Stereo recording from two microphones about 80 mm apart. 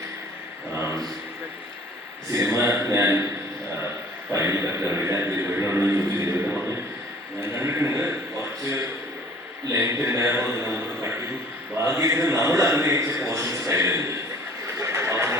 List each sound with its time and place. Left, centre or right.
2.3 s a man's voice: right
4.3 s a man's voice: right
9.7 s a man's voice: right
14.8 s a sound: right